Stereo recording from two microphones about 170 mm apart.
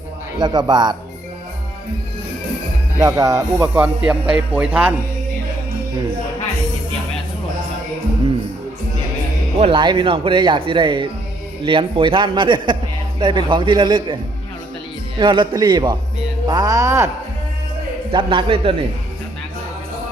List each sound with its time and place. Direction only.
0.3 s speech: 25° right (ahead or behind)
3.0 s speech: 20° right (ahead or behind)
3.8 s a man's voice: 5° right (ahead or behind)
9.6 s speech: 30° right (ahead or behind)
15.2 s speech: 25° right (ahead or behind)
18.1 s a man's voice: 30° right (ahead or behind)